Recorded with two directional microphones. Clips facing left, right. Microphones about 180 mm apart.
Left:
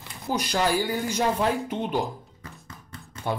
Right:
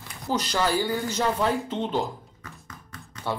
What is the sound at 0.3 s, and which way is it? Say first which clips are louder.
Speech: even; 15° left (ahead or behind).